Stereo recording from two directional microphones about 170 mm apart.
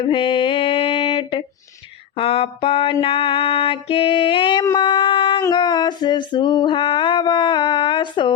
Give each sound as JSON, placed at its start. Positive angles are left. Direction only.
{"t": 0.0, "sound": "mantra", "side_deg": 30}
{"t": 2.1, "sound": "music", "side_deg": 35}
{"t": 4.6, "sound": "speech", "side_deg": 25}
{"t": 5.4, "sound": "a sound", "side_deg": 25}